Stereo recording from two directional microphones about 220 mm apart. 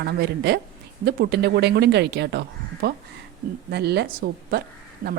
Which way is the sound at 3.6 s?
50° right (ahead or behind).